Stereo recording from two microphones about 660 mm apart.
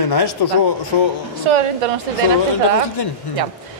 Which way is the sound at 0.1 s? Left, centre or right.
Left.